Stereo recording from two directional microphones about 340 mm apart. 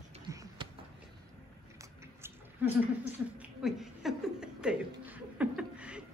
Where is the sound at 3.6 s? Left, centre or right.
Centre.